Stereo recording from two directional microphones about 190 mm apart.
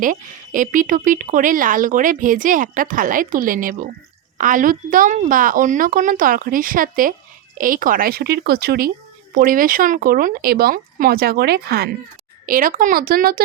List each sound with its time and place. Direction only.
0.0 s speech: 45° right (ahead or behind)